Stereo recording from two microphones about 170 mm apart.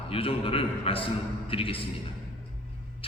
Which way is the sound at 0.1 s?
35° left (ahead or behind).